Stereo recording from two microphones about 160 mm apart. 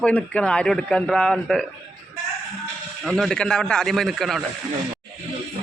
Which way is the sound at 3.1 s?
Centre (ahead or behind).